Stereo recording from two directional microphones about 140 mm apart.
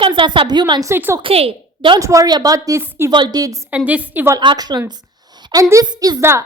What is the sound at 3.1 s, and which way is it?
Speech, 30° right (ahead or behind).